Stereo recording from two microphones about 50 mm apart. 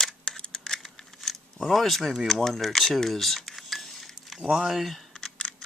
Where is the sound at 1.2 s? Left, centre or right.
Centre.